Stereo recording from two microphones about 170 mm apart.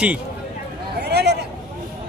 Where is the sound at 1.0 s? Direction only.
75° right (ahead or behind).